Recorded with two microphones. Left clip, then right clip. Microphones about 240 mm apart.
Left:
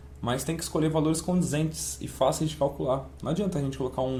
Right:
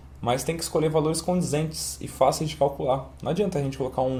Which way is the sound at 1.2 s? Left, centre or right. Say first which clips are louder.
Right 4 dB; right.